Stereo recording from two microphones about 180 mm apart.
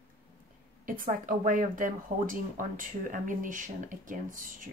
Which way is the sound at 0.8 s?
50° right (ahead or behind).